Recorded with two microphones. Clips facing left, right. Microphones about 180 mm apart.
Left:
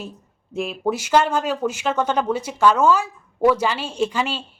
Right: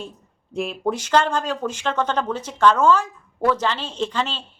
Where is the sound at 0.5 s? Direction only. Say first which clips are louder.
Left 1 dB; centre (ahead or behind).